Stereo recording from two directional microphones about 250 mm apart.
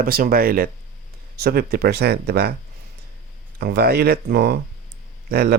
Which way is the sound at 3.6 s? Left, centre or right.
Right.